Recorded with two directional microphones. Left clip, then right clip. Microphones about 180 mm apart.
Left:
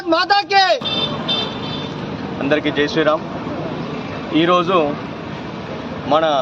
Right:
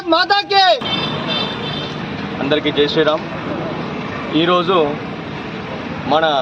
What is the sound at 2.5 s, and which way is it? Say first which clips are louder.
Speech: right 2 dB; centre (ahead or behind).